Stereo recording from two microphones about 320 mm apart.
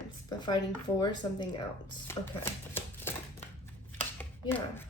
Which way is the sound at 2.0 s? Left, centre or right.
Centre.